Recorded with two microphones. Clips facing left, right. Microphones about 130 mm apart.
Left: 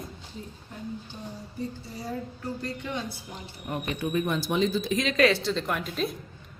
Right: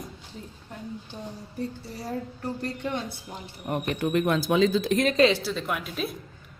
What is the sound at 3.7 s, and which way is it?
Speech, 60° right (ahead or behind).